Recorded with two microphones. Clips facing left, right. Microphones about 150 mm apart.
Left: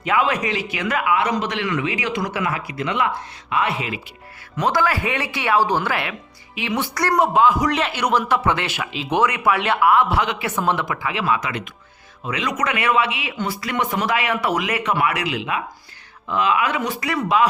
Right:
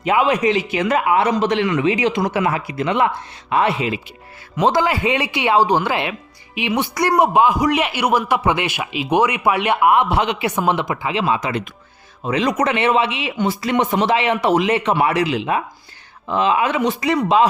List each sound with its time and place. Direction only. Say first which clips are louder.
0.0 s a man's voice: right 4 dB; 20° right (ahead or behind)